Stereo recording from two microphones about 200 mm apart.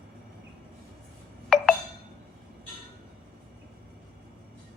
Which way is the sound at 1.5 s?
Centre (ahead or behind).